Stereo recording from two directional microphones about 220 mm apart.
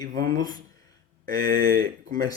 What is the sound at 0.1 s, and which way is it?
Speech, 40° right (ahead or behind).